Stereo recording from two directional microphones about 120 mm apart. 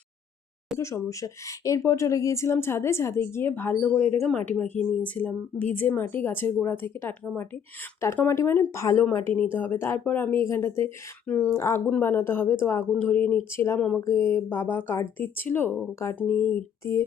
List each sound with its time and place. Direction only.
0.8 s speech: 25° left (ahead or behind)
13.7 s speech: 10° left (ahead or behind)
14.0 s speech: 25° left (ahead or behind)